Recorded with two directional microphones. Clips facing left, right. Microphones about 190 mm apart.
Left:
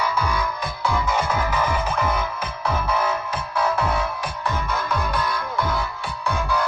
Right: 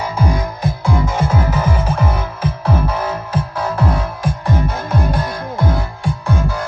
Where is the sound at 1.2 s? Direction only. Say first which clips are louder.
Right 5 dB; 25° right (ahead or behind).